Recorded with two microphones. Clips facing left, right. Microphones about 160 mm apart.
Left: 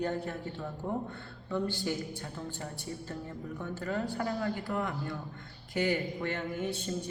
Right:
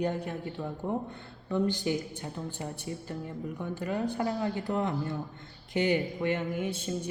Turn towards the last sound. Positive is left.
turn(degrees=-15)  # may be behind; listen again after turning